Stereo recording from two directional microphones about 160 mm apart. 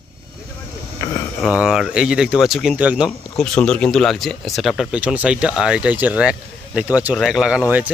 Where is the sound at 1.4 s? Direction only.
5° right (ahead or behind).